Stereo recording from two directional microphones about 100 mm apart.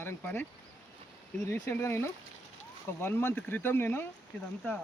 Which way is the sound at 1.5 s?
25° left (ahead or behind).